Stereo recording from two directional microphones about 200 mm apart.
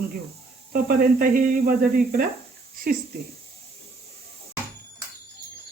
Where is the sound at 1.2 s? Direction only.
45° right (ahead or behind).